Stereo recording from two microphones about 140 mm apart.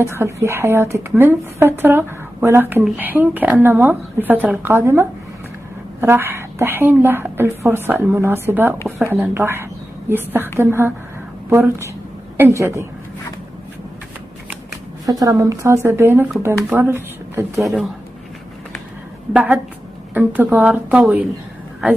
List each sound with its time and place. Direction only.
0.0 s a woman's voice: 20° right (ahead or behind)
12.4 s speech: 20° right (ahead or behind)
15.0 s speech: 25° right (ahead or behind)
17.6 s speech: centre (ahead or behind)
19.3 s speech: 10° right (ahead or behind)